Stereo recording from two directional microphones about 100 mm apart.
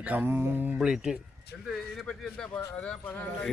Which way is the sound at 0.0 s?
15° right (ahead or behind).